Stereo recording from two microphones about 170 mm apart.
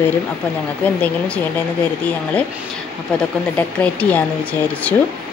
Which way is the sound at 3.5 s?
10° left (ahead or behind).